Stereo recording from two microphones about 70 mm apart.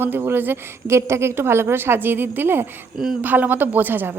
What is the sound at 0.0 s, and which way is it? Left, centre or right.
Speech, right.